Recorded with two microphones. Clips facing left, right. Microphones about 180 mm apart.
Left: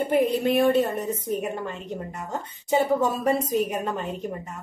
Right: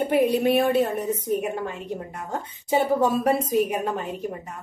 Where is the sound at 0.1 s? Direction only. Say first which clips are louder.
Right 2 dB; 5° right (ahead or behind).